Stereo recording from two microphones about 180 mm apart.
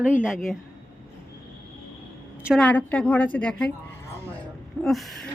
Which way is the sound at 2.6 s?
5° left (ahead or behind).